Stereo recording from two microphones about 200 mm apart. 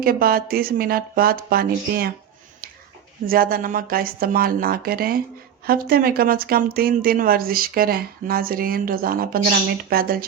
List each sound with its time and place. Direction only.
0.0 s speech: 50° right (ahead or behind)
3.2 s speech: 45° right (ahead or behind)